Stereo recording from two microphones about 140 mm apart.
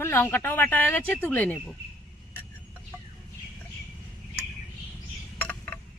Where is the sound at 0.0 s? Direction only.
15° left (ahead or behind).